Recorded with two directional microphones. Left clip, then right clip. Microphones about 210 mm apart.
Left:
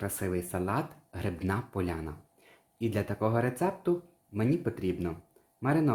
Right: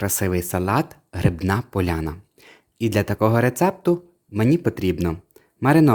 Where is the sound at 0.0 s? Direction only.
50° right (ahead or behind).